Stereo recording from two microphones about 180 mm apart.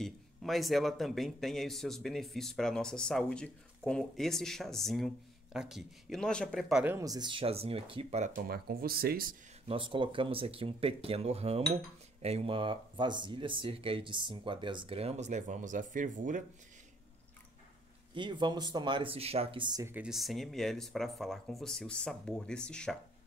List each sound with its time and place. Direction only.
0.0 s a man's voice: centre (ahead or behind)
6.8 s speech: 15° right (ahead or behind); by 8.3 s 35° right (ahead or behind)
8.4 s speech: 55° right (ahead or behind)
9.7 s speech: 30° right (ahead or behind); by 16.4 s 45° right (ahead or behind)
18.1 s speech: 25° right (ahead or behind)
19.9 s a man's voice: 5° right (ahead or behind)